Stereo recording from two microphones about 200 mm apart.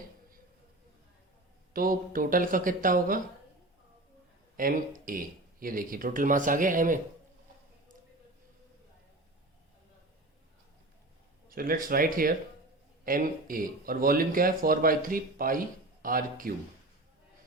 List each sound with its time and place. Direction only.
1.7 s speech: 45° right (ahead or behind)
4.5 s speech: 45° right (ahead or behind)
11.4 s speech: 45° right (ahead or behind)